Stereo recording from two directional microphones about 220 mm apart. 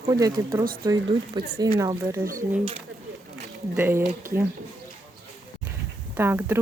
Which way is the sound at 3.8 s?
10° right (ahead or behind).